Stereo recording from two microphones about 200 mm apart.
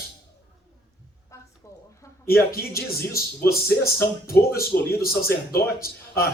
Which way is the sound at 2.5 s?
50° left (ahead or behind).